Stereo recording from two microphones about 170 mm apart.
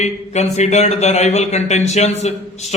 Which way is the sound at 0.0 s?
40° left (ahead or behind).